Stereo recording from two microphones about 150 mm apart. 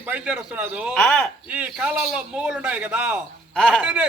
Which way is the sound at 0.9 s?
5° left (ahead or behind).